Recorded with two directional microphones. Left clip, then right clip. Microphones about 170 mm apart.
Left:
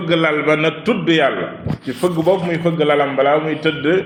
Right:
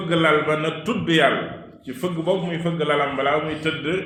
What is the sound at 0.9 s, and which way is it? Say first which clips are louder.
A man's voice: left 2 dB; 40° left (ahead or behind).